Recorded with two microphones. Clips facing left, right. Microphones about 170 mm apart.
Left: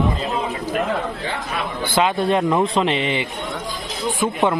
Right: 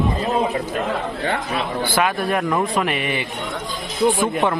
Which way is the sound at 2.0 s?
20° left (ahead or behind).